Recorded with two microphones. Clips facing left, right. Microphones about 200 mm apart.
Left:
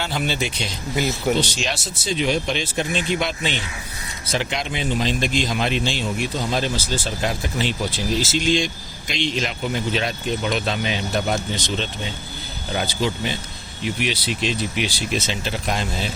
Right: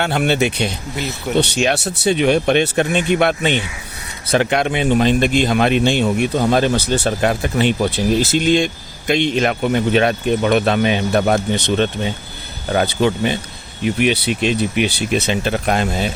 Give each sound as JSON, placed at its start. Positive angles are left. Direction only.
{"t": 0.0, "sound": "speech", "side_deg": -65}